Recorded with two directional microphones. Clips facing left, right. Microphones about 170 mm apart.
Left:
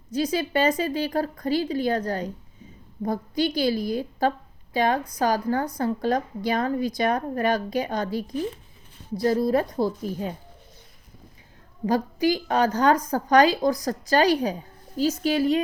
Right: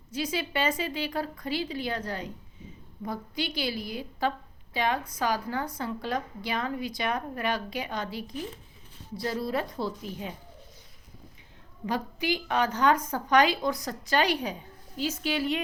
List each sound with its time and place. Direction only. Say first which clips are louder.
0.1 s a woman's voice: left 7 dB; 40° left (ahead or behind)
11.9 s a woman's voice: left 7 dB; 40° left (ahead or behind)